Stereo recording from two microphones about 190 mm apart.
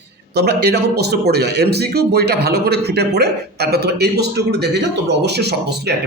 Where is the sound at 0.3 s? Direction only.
60° right (ahead or behind).